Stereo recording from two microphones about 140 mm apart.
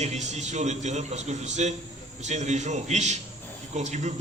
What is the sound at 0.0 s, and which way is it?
A man's voice, 55° right (ahead or behind).